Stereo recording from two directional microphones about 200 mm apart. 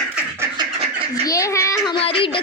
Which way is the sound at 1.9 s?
25° left (ahead or behind).